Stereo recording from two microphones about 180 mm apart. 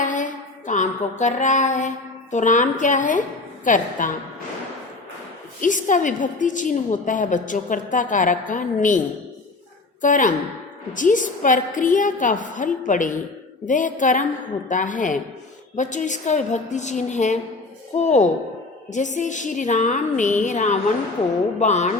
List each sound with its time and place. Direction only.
0.0 s music: 45° left (ahead or behind)
2.3 s a woman's voice: 45° left (ahead or behind)
5.5 s a woman's voice: 45° left (ahead or behind)